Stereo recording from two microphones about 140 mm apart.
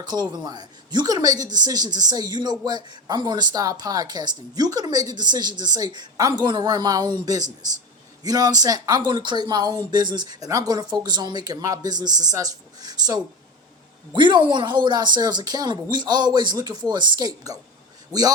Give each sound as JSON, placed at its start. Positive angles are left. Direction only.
{"t": 0.0, "sound": "speech", "side_deg": -30}